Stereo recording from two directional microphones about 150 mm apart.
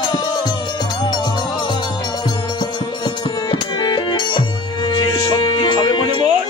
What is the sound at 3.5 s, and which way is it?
Music, 30° left (ahead or behind).